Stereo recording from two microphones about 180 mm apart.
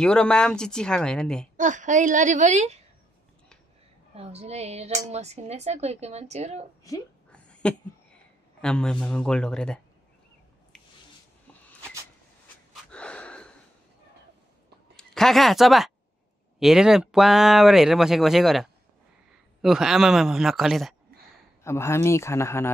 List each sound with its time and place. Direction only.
0.0 s speech: 5° left (ahead or behind)
1.6 s a woman's voice: 45° right (ahead or behind)
4.1 s a woman's voice: 35° right (ahead or behind)
6.9 s speech: 20° left (ahead or behind)
7.2 s a sound: 5° left (ahead or behind)
8.5 s speech: 5° left (ahead or behind)
12.9 s gasp: 5° left (ahead or behind)
15.0 s speech: centre (ahead or behind)
21.6 s speech: 15° left (ahead or behind)